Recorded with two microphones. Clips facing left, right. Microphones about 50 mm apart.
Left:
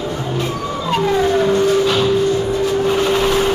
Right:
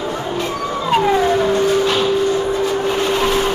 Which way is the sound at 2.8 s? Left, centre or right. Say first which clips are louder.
Left 2 dB; centre.